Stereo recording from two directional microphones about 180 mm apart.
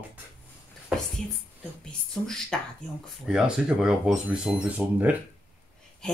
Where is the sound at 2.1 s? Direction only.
5° left (ahead or behind).